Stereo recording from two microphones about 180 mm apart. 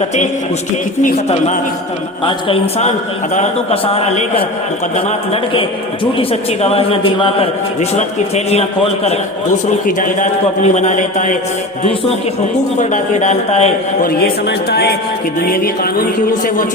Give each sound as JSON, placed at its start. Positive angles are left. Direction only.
{"t": 2.2, "sound": "a man's voice", "side_deg": 35}
{"t": 9.0, "sound": "a man's voice", "side_deg": 45}
{"t": 12.8, "sound": "a man's voice", "side_deg": 40}
{"t": 14.0, "sound": "music", "side_deg": 60}